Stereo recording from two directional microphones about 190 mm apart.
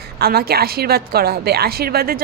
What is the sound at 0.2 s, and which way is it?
A woman's voice, 55° right (ahead or behind).